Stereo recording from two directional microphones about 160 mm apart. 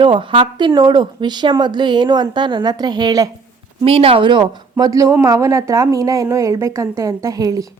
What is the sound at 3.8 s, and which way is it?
Speech, 35° right (ahead or behind).